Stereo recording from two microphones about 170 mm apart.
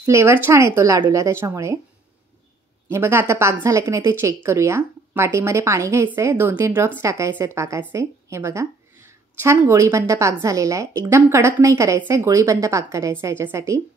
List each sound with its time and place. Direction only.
0.0 s a woman's voice: 15° right (ahead or behind)
2.9 s a woman's voice: 15° right (ahead or behind)